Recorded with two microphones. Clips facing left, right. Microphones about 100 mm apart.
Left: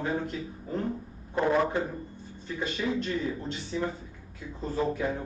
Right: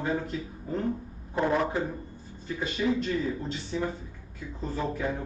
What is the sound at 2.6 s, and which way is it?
Speech, 5° right (ahead or behind).